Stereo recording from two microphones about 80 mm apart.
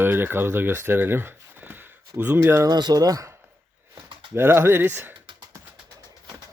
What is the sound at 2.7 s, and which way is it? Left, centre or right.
Speech, right.